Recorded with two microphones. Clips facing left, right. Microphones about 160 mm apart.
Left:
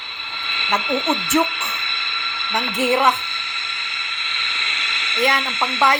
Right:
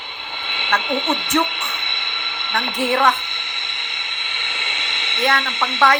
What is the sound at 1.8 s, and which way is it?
Train, 20° right (ahead or behind).